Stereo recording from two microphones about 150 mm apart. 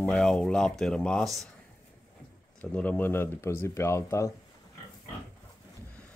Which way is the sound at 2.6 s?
10° left (ahead or behind).